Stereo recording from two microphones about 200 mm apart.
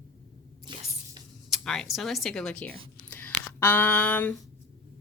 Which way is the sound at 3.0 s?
10° left (ahead or behind).